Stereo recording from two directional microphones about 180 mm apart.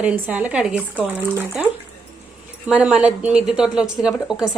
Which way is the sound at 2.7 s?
5° right (ahead or behind).